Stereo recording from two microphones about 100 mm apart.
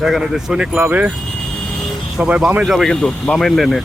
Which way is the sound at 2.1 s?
10° right (ahead or behind).